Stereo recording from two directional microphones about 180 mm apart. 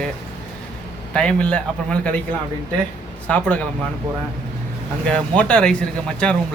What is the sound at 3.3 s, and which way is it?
Speech, 10° left (ahead or behind).